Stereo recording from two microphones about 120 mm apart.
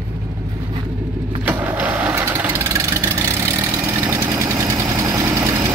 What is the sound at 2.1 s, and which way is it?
Vehicle, 20° right (ahead or behind).